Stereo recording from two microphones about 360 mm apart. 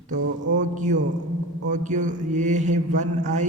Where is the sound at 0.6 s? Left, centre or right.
Centre.